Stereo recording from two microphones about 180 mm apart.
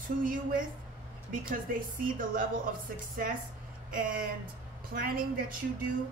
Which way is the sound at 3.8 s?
50° right (ahead or behind).